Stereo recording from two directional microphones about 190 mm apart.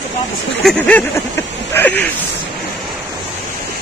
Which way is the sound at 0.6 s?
5° left (ahead or behind).